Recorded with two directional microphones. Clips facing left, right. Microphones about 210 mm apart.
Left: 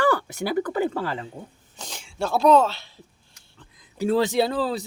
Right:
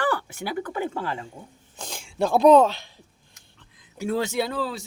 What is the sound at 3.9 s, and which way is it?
Speech, 35° left (ahead or behind).